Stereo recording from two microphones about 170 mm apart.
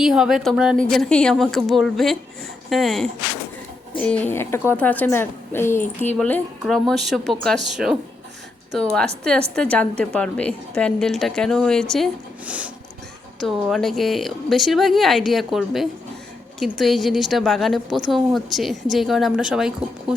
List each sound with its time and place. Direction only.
0.0 s a woman's voice: centre (ahead or behind)